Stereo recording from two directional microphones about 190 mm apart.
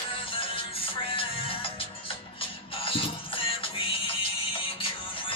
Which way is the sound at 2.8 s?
30° left (ahead or behind).